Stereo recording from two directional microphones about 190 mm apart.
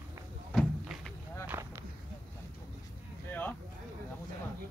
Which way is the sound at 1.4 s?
15° right (ahead or behind).